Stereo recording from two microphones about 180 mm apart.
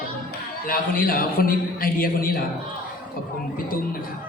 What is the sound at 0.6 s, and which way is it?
A man's voice, 55° left (ahead or behind).